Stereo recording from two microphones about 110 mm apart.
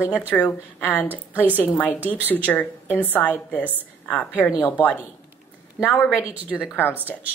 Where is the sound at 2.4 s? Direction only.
15° left (ahead or behind).